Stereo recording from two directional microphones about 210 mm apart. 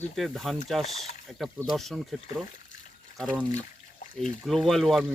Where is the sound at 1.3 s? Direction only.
Centre (ahead or behind).